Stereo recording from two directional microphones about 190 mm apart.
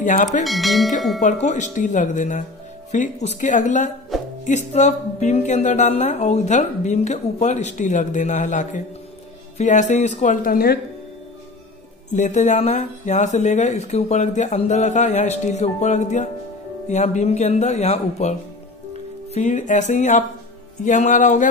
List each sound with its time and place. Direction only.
0.0 s speech: 40° left (ahead or behind)
0.4 s bell: centre (ahead or behind)
1.2 s speech: 40° left (ahead or behind)
4.1 s music: centre (ahead or behind)
4.7 s speech: 35° left (ahead or behind)
12.1 s speech: 40° left (ahead or behind)
19.3 s speech: 40° left (ahead or behind)